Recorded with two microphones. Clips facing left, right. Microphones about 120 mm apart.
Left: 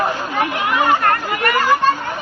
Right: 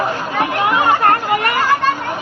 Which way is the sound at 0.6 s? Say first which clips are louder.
Right 2 dB; 25° right (ahead or behind).